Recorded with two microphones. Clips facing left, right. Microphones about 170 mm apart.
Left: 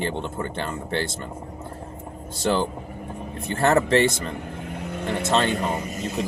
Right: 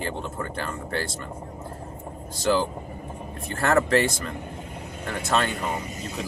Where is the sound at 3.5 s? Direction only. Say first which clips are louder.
Left 2 dB; 25° left (ahead or behind).